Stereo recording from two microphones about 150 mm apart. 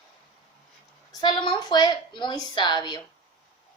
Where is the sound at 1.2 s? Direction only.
30° left (ahead or behind).